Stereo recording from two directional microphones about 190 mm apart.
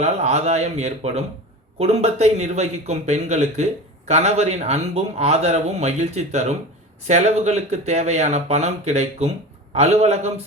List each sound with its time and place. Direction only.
0.0 s speech: 35° right (ahead or behind)